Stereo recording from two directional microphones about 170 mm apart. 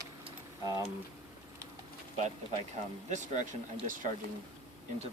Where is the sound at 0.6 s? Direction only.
20° right (ahead or behind).